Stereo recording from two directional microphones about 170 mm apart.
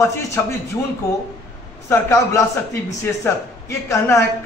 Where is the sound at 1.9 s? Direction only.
15° left (ahead or behind).